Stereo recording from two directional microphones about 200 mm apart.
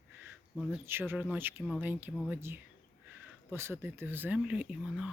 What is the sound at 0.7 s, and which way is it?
Speech, 10° right (ahead or behind).